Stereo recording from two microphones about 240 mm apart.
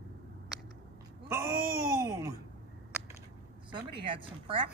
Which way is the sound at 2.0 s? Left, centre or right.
Centre.